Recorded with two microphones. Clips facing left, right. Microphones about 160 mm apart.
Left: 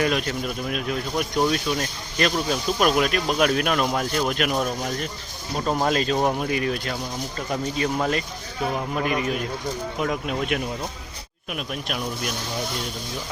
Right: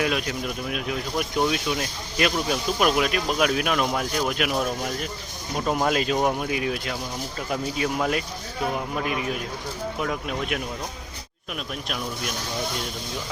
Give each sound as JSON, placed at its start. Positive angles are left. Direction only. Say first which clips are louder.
{"t": 0.0, "sound": "speech", "louder": "left 2 dB", "side_deg": 0}